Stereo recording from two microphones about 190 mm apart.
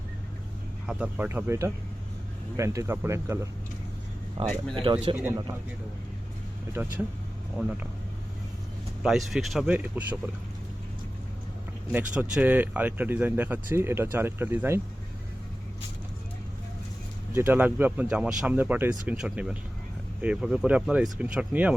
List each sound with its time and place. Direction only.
0.9 s speech: 5° right (ahead or behind)
4.4 s speech: centre (ahead or behind)
4.8 s speech: 25° right (ahead or behind)
6.8 s speech: 10° right (ahead or behind)
9.0 s speech: centre (ahead or behind)
11.9 s speech: 10° right (ahead or behind)
17.3 s speech: 10° right (ahead or behind)